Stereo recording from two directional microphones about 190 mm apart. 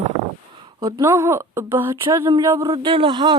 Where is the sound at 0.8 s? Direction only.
20° right (ahead or behind).